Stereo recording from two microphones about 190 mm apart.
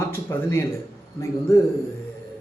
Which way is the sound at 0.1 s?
15° left (ahead or behind).